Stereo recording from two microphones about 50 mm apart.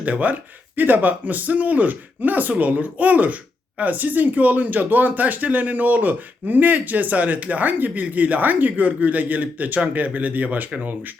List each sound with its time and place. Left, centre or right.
0.0 s speech: right